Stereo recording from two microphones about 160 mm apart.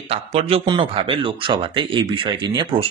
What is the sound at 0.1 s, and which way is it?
Speech, 40° right (ahead or behind).